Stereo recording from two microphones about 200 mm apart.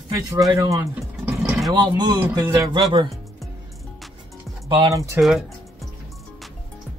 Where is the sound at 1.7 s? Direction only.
20° right (ahead or behind).